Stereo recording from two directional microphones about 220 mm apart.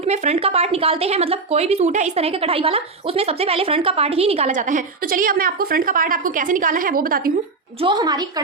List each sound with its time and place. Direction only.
0.0 s speech: 30° right (ahead or behind)
7.8 s speech: 20° right (ahead or behind)